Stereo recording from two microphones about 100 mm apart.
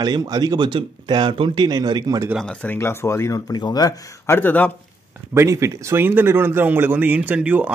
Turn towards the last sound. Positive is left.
turn(degrees=-15)  # may be behind; listen again after turning